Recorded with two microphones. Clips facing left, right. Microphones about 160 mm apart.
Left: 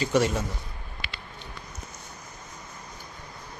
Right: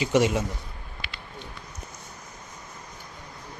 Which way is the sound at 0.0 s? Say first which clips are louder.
Right 2 dB; 15° right (ahead or behind).